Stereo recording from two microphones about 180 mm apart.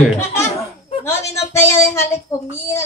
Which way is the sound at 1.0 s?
15° left (ahead or behind).